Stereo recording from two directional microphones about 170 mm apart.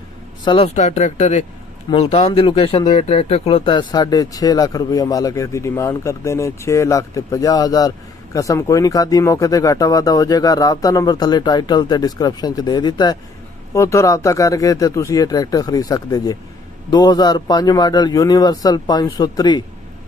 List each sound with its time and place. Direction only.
0.5 s speech: 40° left (ahead or behind)
1.9 s speech: 30° left (ahead or behind)